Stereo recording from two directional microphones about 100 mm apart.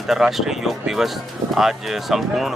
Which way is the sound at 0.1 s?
5° right (ahead or behind).